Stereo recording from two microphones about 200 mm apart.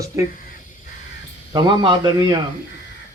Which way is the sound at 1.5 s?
20° right (ahead or behind).